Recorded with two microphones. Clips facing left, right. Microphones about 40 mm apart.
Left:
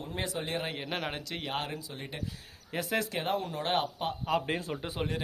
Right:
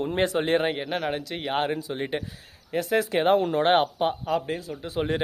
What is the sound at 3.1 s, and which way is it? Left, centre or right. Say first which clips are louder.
Speech: right 11 dB; right.